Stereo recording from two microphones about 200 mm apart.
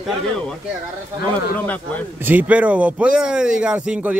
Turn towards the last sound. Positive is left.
turn(degrees=-5)  # may be behind; listen again after turning